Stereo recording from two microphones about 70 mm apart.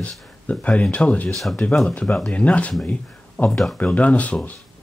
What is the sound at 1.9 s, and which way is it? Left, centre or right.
Speech, left.